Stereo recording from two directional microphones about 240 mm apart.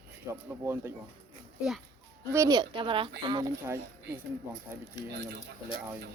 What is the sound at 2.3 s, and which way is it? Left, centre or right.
Speech, centre.